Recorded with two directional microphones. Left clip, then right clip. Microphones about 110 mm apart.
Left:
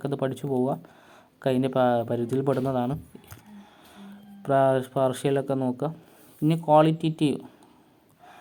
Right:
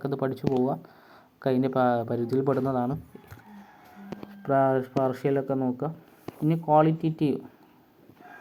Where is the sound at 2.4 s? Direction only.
25° left (ahead or behind).